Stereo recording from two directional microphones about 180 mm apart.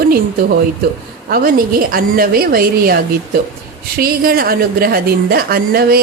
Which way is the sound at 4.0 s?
55° right (ahead or behind).